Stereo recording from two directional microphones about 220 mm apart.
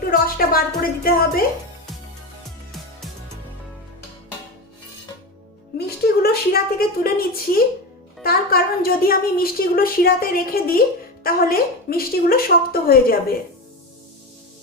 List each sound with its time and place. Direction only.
0.1 s a woman's voice: 40° left (ahead or behind)
5.7 s a woman's voice: 45° left (ahead or behind)